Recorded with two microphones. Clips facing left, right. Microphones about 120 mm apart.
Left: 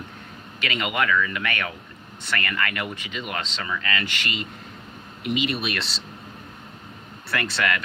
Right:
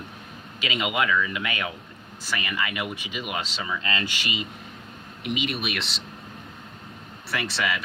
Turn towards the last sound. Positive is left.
turn(degrees=-5)  # may be behind; listen again after turning